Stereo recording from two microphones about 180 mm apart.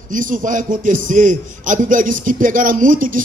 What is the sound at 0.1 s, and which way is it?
A man's voice, 45° right (ahead or behind).